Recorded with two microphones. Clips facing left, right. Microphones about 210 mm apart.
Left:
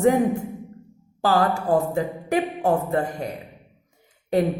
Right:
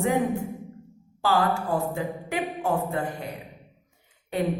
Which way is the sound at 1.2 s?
40° left (ahead or behind).